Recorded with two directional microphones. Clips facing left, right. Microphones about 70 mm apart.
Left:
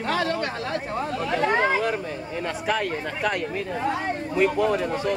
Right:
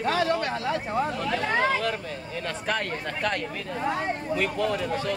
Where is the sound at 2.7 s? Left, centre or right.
Centre.